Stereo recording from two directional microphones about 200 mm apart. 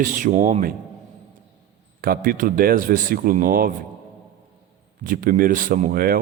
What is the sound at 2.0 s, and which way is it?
A man's voice, 45° right (ahead or behind).